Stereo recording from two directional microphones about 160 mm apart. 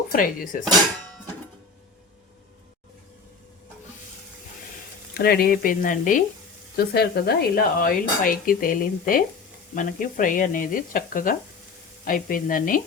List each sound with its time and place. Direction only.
0.1 s speech: 60° left (ahead or behind)
5.1 s speech: 75° left (ahead or behind); by 6.2 s 55° left (ahead or behind)
6.7 s speech: 80° left; by 12.8 s 60° left (ahead or behind)